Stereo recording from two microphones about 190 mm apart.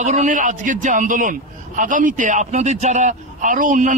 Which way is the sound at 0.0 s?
40° right (ahead or behind).